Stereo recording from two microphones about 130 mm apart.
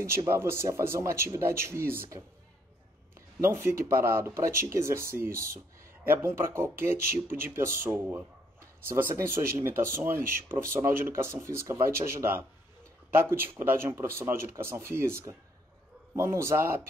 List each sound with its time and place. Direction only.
0.3 s speech: 20° right (ahead or behind)
3.3 s speech: 20° right (ahead or behind)